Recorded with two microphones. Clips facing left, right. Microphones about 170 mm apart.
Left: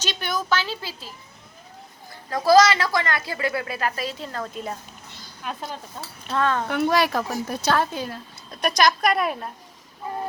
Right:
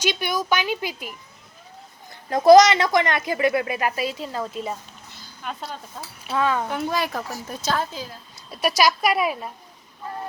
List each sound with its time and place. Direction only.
0.0 s a woman's voice: 10° right (ahead or behind)
2.3 s a woman's voice: 20° right (ahead or behind)
6.7 s a woman's voice: 70° left (ahead or behind)
8.4 s a woman's voice: 5° right (ahead or behind)